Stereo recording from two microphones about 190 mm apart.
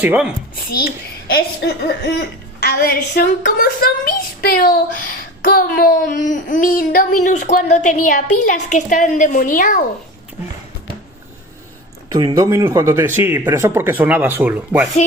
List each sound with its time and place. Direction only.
0.0 s speech: 10° right (ahead or behind)
1.3 s a woman's voice: 55° left (ahead or behind)
12.1 s speech: 20° right (ahead or behind)